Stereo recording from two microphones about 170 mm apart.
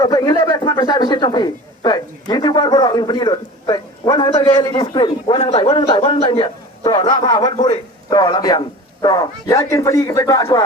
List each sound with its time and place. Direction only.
0.0 s a man's voice: 20° left (ahead or behind)